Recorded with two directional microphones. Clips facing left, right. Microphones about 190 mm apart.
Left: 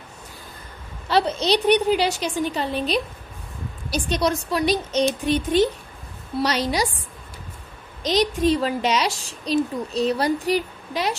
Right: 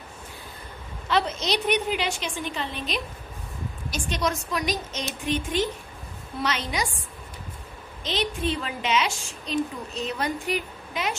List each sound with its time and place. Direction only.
1.0 s a woman's voice: 35° left (ahead or behind)
8.0 s a woman's voice: 40° left (ahead or behind)